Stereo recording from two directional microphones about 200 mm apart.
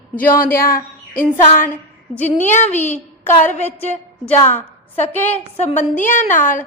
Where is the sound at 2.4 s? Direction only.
35° left (ahead or behind).